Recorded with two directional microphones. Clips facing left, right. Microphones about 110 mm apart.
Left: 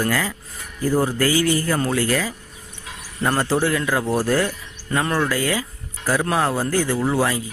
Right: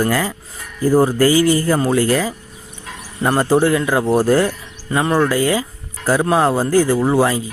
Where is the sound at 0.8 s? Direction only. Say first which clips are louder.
Right 6 dB; 40° right (ahead or behind).